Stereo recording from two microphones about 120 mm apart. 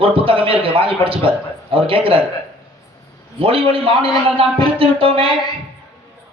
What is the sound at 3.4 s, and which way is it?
A man's voice, 50° right (ahead or behind).